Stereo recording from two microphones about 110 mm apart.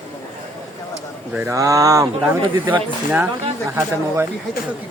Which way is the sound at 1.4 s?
25° right (ahead or behind).